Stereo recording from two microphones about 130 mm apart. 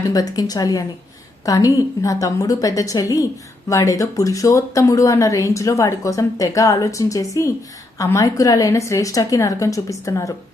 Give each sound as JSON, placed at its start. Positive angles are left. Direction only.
{"t": 0.1, "sound": "speech", "side_deg": 30}